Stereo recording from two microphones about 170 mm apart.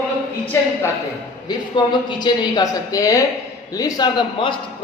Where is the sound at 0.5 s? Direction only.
15° left (ahead or behind).